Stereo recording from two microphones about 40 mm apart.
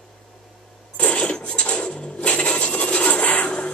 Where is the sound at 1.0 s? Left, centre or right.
Left.